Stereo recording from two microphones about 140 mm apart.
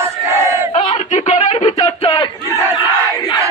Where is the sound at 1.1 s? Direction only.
60° left (ahead or behind).